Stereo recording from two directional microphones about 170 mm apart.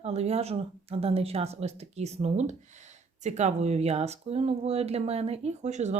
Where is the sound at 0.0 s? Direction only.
40° right (ahead or behind).